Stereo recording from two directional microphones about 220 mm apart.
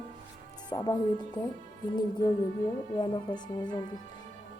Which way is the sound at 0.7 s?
15° left (ahead or behind).